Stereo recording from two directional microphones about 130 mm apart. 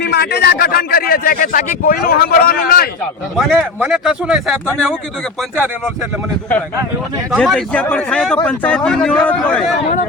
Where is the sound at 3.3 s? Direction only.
5° left (ahead or behind).